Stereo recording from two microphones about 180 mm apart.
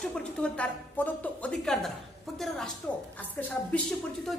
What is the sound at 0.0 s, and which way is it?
A woman's voice, 5° left (ahead or behind).